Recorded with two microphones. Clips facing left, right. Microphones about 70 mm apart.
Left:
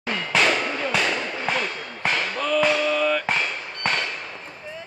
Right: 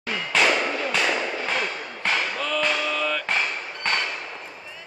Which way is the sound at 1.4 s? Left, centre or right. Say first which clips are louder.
Left 1 dB; centre.